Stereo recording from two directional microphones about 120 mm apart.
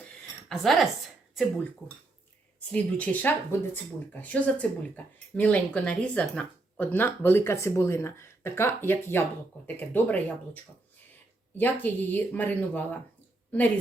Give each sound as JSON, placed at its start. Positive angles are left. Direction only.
{"t": 0.4, "sound": "speech", "side_deg": 0}
{"t": 2.7, "sound": "speech", "side_deg": 10}